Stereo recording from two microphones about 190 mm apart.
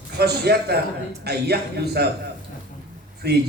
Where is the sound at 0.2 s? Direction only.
60° right (ahead or behind).